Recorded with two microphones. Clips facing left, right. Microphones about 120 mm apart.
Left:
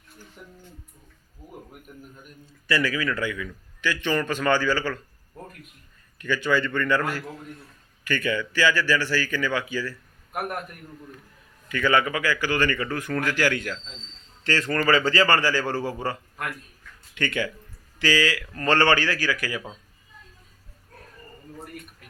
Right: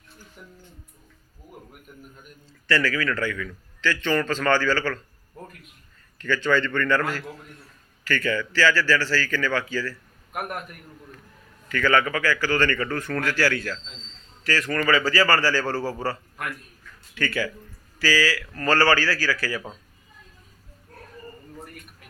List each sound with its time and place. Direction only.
2.5 s a man's voice: 15° left (ahead or behind)
6.1 s a man's voice: 15° left (ahead or behind)
11.7 s a man's voice: 15° left (ahead or behind)